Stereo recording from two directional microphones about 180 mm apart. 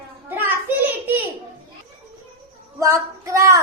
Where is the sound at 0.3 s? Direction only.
10° right (ahead or behind).